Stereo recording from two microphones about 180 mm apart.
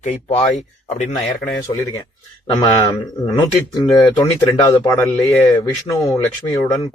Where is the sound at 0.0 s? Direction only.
35° left (ahead or behind).